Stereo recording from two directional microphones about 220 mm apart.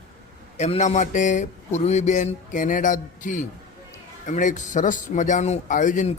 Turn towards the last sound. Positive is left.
turn(degrees=35)  # may be behind; listen again after turning